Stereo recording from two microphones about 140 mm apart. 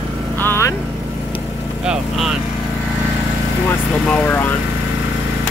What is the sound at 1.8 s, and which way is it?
Speech, 5° right (ahead or behind).